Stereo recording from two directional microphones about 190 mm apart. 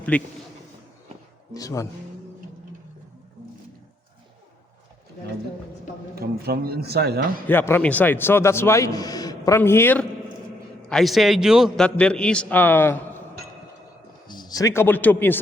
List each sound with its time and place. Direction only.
0.1 s a man's voice: 5° left (ahead or behind)
1.5 s a man's voice: 20° left (ahead or behind)
6.1 s a man's voice: 55° right (ahead or behind)
7.4 s a man's voice: 10° left (ahead or behind)
14.3 s a man's voice: 20° left (ahead or behind)